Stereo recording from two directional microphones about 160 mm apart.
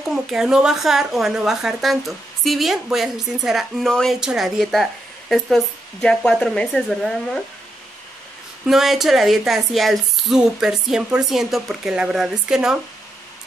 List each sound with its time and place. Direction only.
0.0 s speech: 5° right (ahead or behind)
8.6 s speech: centre (ahead or behind)